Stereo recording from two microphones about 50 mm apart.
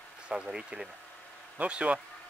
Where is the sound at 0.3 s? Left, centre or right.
Centre.